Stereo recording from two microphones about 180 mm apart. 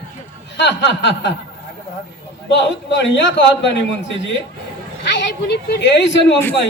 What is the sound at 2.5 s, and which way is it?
A man's voice, 85° left.